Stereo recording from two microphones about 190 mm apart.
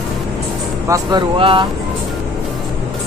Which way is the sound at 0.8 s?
15° right (ahead or behind).